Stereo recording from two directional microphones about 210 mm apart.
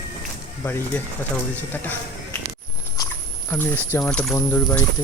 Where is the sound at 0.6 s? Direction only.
10° left (ahead or behind).